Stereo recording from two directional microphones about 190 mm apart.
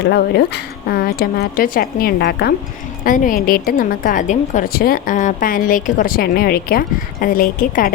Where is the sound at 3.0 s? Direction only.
45° left (ahead or behind).